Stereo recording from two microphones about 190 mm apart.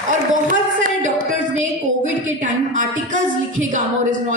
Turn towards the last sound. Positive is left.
turn(degrees=-45)  # may be behind; listen again after turning